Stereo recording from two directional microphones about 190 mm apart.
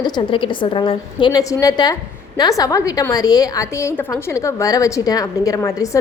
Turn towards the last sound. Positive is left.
turn(degrees=15)  # may be behind; listen again after turning